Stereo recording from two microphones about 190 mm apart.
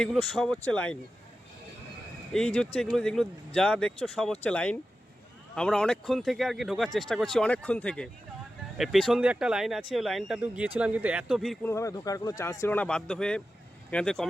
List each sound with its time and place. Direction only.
0.0 s speech: centre (ahead or behind)
2.3 s speech: centre (ahead or behind)
11.6 s speech: 15° left (ahead or behind)